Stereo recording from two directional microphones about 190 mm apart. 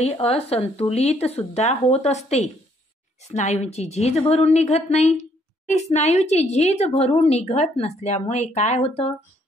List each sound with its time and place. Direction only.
0.0 s speech: 30° left (ahead or behind)